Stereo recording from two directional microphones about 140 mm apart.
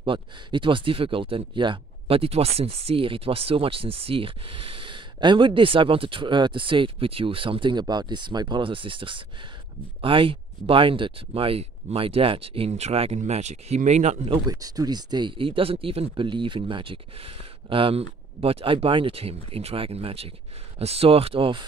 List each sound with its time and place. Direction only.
0.0 s speech: 35° right (ahead or behind); by 14.3 s 55° right (ahead or behind)
14.5 s speech: 25° right (ahead or behind)